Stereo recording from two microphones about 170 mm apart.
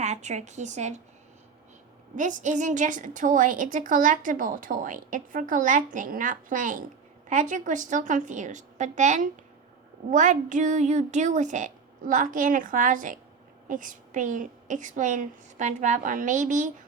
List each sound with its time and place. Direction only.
0.0 s a woman's voice: 40° right (ahead or behind)
2.1 s a woman's voice: 50° right (ahead or behind)